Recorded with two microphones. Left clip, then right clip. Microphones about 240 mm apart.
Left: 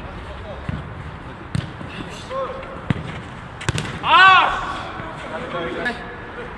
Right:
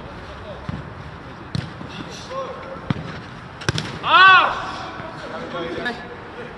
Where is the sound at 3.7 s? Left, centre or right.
Left.